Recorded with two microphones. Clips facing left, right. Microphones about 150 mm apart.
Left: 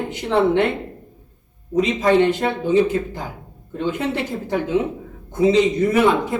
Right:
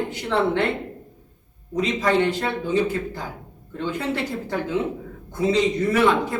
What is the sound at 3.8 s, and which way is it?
A woman's voice, 20° left (ahead or behind).